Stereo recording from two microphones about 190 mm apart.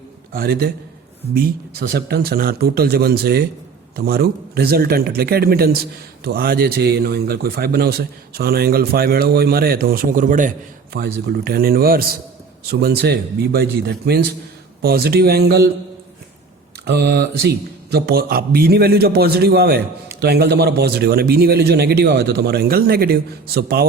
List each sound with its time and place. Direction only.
0.3 s speech: 55° right (ahead or behind)
10.9 s a man's voice: 55° right (ahead or behind)
16.8 s a man's voice: 60° right (ahead or behind)